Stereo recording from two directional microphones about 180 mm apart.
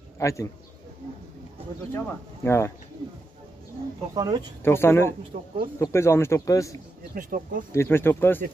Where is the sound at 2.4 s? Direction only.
15° left (ahead or behind).